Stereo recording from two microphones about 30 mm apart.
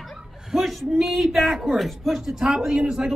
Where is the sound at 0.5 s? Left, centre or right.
Centre.